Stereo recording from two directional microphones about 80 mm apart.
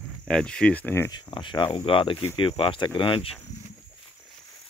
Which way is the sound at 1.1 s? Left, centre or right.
Left.